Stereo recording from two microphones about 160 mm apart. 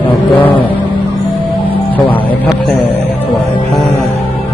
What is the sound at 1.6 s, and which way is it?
Music, 10° left (ahead or behind).